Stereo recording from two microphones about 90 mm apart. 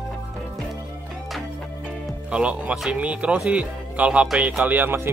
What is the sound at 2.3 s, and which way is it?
Speech, 10° right (ahead or behind).